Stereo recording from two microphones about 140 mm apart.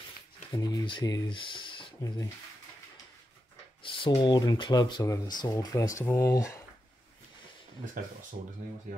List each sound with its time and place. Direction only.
0.5 s speech: 30° left (ahead or behind)
3.8 s speech: 40° left (ahead or behind); by 6.6 s 20° left (ahead or behind)